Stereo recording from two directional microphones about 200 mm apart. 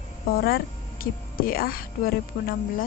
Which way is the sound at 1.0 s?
45° left (ahead or behind).